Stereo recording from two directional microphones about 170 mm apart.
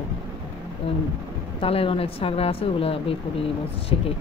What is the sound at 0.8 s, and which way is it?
Speech, 35° left (ahead or behind).